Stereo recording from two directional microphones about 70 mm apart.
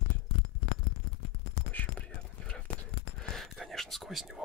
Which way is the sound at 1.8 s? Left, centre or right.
Left.